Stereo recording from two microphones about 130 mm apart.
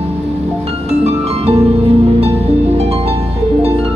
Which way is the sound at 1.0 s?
55° right (ahead or behind).